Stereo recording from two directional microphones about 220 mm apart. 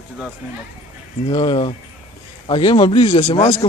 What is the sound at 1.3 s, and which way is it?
Speech, 20° left (ahead or behind).